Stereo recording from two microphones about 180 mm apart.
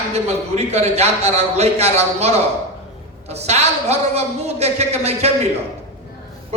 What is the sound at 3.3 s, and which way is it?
A man's voice, 35° right (ahead or behind).